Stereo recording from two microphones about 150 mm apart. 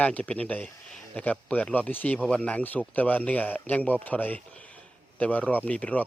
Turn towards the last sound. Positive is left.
turn(degrees=10)  # may be behind; listen again after turning